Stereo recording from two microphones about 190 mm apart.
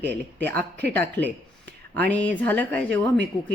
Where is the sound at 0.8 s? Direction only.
60° right (ahead or behind).